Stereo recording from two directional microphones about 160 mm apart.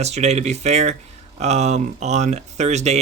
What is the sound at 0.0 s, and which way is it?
Speech, 45° right (ahead or behind).